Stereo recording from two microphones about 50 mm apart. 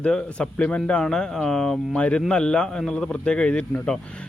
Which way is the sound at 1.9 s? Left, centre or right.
Left.